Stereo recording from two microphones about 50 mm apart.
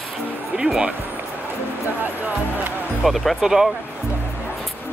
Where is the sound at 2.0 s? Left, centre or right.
Right.